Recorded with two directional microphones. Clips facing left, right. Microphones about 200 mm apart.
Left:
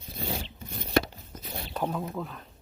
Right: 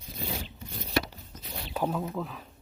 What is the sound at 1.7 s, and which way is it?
Speech, 5° right (ahead or behind).